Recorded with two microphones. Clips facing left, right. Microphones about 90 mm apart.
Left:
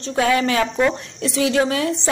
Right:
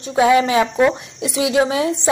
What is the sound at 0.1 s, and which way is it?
A woman's voice, 20° right (ahead or behind).